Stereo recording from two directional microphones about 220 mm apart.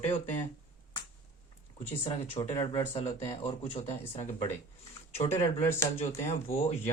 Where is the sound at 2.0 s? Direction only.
25° left (ahead or behind).